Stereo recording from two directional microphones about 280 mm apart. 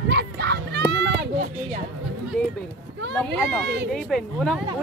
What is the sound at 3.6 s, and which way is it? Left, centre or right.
Speech, right.